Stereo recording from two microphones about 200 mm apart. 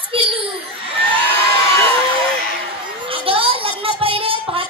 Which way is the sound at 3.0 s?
25° right (ahead or behind).